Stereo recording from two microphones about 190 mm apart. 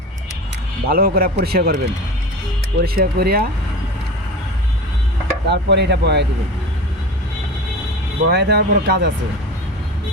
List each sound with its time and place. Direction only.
0.9 s speech: 50° right (ahead or behind)
5.5 s speech: 65° right (ahead or behind)
8.3 s speech: 60° right (ahead or behind)